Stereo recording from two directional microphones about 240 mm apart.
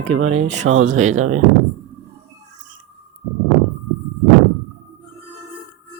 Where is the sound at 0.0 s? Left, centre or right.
Right.